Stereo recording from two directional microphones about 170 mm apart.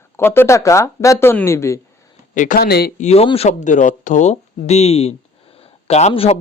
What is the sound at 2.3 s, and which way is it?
Speech, 50° left (ahead or behind).